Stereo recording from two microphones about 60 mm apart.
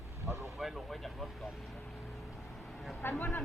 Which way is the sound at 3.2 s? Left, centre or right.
Left.